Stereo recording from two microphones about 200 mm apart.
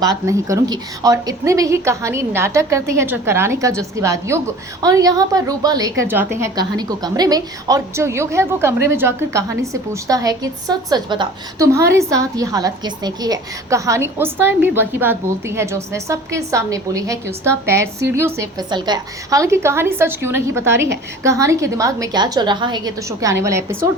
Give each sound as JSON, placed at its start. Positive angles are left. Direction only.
{"t": 0.0, "sound": "a woman's voice", "side_deg": -15}